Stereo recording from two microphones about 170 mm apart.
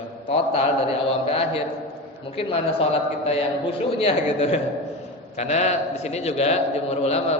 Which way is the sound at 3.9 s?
35° left (ahead or behind).